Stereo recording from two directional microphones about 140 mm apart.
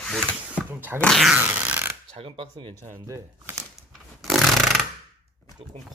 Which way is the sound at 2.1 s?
40° right (ahead or behind).